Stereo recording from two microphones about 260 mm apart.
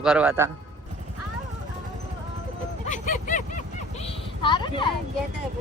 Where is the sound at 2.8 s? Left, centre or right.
Left.